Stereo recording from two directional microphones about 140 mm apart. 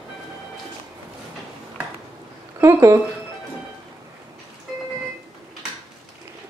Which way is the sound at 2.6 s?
20° right (ahead or behind).